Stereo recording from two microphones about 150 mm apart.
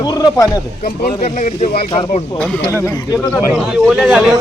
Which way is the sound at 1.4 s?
50° left (ahead or behind).